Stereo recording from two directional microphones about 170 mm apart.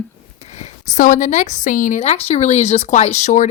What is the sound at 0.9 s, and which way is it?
Speech, 50° left (ahead or behind).